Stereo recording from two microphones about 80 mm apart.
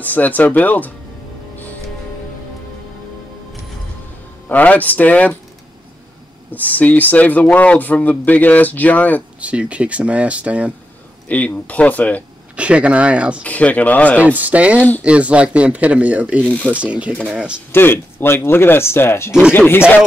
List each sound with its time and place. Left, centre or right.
0.0 s speech: left
4.5 s speech: left
6.5 s speech: left
9.4 s speech: centre
11.2 s speech: centre
12.5 s speech: centre
13.4 s speech: centre
14.2 s speech: centre
14.8 s speech: left
15.0 s speech: centre
16.4 s speech: centre
16.7 s speech: centre
17.7 s speech: left